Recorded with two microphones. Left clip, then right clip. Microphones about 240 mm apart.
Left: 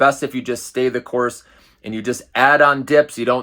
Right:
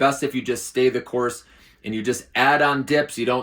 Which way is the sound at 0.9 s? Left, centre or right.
Left.